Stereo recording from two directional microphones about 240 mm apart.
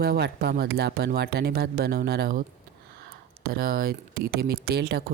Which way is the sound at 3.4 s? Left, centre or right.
Right.